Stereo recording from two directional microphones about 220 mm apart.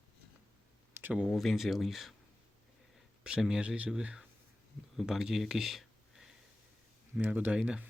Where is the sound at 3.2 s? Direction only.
5° right (ahead or behind).